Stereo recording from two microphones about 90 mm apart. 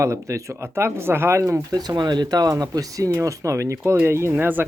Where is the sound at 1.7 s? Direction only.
50° right (ahead or behind).